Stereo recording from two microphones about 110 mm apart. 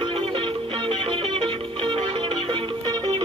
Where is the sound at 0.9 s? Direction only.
50° right (ahead or behind).